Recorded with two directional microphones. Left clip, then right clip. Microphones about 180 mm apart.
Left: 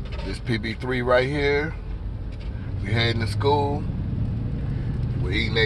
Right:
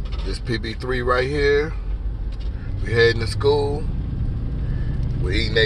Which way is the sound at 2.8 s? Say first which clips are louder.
Right 8 dB; 5° left (ahead or behind).